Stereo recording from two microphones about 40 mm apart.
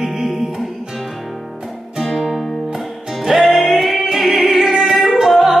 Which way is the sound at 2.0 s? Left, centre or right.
Centre.